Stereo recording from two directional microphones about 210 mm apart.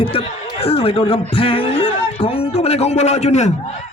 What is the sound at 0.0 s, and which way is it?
A man's voice, 25° left (ahead or behind).